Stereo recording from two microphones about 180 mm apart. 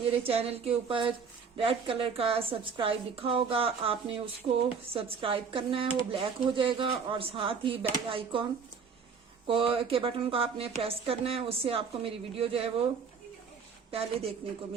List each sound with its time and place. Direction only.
0.1 s a woman's voice: 30° right (ahead or behind)
9.5 s a woman's voice: 30° right (ahead or behind)
13.9 s a woman's voice: 35° right (ahead or behind)